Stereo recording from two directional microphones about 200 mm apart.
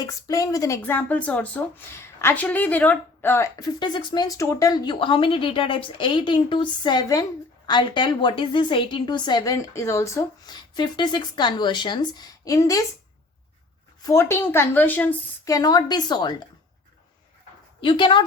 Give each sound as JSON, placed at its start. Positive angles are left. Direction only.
{"t": 0.0, "sound": "a woman's voice", "side_deg": 15}
{"t": 14.0, "sound": "a woman's voice", "side_deg": 15}
{"t": 17.7, "sound": "speech", "side_deg": 25}